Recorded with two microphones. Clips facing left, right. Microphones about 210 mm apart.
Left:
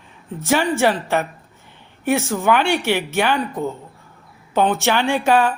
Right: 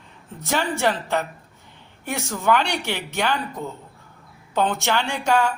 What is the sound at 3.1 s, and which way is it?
Speech, 15° left (ahead or behind).